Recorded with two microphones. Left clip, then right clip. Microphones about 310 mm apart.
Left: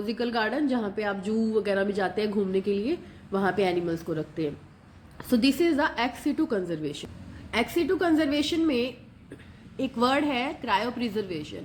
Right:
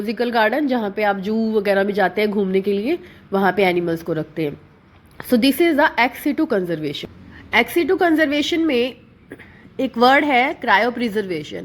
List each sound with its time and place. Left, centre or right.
0.0 s a woman's voice: centre